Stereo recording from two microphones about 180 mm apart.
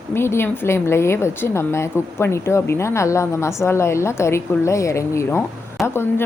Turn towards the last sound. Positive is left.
turn(degrees=15)  # may be behind; listen again after turning